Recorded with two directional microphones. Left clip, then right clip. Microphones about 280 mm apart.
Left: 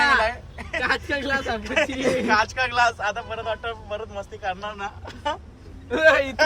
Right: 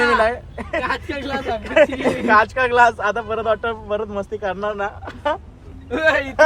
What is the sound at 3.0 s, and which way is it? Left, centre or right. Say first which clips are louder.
Speech: right 6 dB; right.